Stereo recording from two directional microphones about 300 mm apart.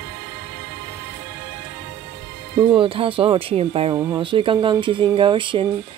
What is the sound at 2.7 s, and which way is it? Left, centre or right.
Speech, centre.